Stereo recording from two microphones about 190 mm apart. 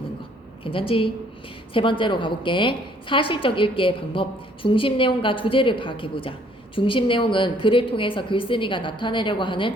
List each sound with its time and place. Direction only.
0.6 s a woman's voice: 30° left (ahead or behind)